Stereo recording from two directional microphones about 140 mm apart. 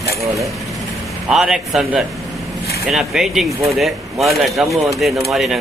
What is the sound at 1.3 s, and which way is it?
Speech, 5° right (ahead or behind).